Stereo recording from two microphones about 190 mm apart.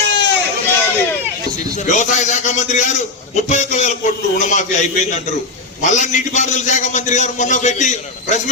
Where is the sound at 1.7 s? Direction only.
40° left (ahead or behind).